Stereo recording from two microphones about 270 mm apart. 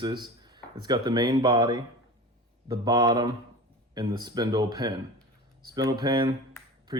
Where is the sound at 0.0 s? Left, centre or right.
Centre.